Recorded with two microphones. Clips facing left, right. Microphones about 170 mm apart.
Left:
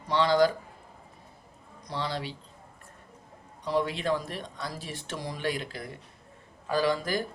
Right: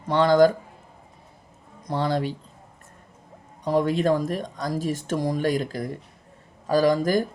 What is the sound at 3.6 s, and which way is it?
Speech, 45° right (ahead or behind).